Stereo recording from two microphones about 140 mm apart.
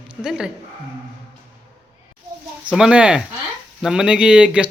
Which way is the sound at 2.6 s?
5° right (ahead or behind).